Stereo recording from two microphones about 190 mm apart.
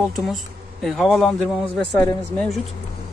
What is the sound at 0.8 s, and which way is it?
Speech, centre (ahead or behind).